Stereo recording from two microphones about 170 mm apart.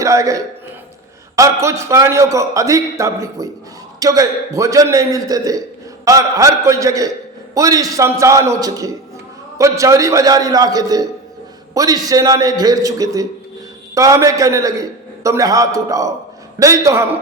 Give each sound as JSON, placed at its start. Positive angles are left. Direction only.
{"t": 0.0, "sound": "a man's voice", "side_deg": -20}